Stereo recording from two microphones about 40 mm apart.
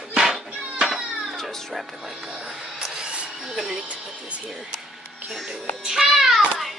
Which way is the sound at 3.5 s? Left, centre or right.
Centre.